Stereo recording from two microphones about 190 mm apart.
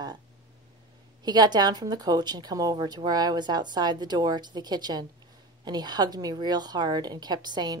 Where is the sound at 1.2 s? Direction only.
20° right (ahead or behind).